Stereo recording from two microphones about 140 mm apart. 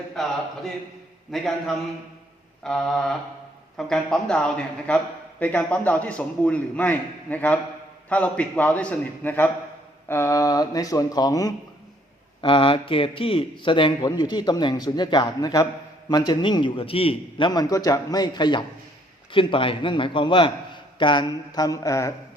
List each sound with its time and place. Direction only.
0.2 s a man's voice: centre (ahead or behind); by 11.5 s 25° left (ahead or behind)
12.4 s a man's voice: 35° left (ahead or behind)